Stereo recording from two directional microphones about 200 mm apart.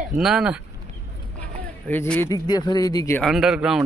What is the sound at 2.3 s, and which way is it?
Speech, 20° left (ahead or behind).